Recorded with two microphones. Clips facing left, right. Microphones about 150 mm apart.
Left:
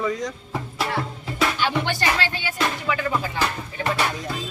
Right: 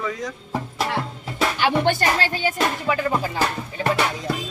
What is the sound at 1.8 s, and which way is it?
Music, 40° right (ahead or behind).